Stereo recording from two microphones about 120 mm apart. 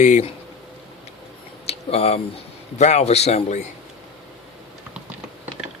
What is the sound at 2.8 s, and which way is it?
Speech, 65° left (ahead or behind).